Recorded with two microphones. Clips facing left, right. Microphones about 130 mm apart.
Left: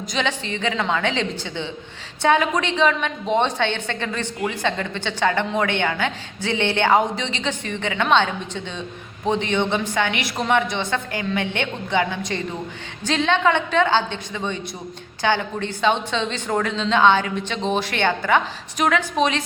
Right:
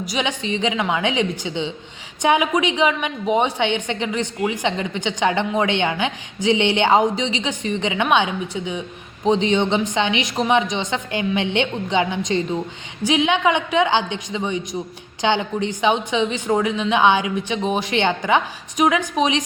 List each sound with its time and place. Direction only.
0.0 s a woman's voice: 15° right (ahead or behind)